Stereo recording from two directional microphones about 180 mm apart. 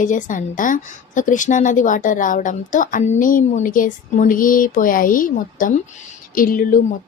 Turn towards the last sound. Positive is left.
turn(degrees=50)  # may be behind; listen again after turning